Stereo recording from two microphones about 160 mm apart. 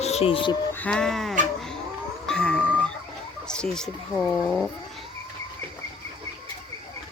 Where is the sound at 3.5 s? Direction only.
5° left (ahead or behind).